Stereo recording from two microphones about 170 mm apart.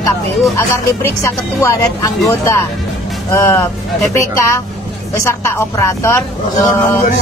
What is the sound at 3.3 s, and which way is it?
Speech, 15° left (ahead or behind).